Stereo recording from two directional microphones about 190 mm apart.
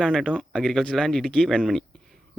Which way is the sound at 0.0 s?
Centre (ahead or behind).